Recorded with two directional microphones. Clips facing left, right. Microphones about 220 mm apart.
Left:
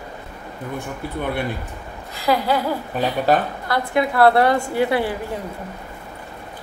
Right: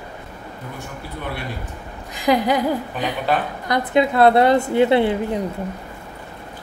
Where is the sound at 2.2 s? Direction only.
15° right (ahead or behind).